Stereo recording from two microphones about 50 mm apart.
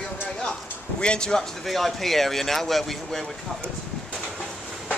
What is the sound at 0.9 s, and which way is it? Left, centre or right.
Speech, centre.